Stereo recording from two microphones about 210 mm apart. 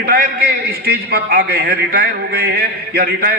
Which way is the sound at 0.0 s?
45° right (ahead or behind).